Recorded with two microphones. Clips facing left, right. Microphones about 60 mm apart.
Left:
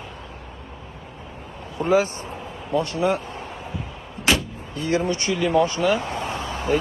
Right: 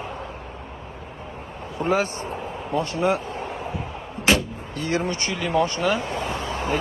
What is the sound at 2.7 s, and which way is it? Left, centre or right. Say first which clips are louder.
Speech: left 1 dB; centre.